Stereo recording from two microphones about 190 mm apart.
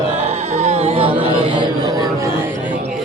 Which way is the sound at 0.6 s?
35° right (ahead or behind).